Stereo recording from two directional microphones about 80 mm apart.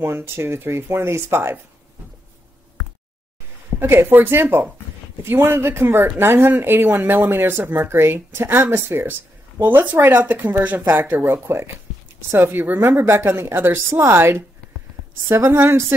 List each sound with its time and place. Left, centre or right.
0.0 s a woman's voice: right
3.8 s a woman's voice: right